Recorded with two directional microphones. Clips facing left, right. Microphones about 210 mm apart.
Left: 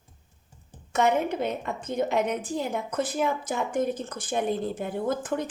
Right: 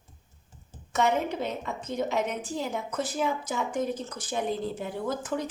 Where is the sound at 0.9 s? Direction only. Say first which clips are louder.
Left 2 dB; 55° left (ahead or behind).